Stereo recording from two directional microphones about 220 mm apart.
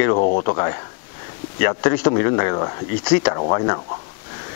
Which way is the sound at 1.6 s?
15° left (ahead or behind).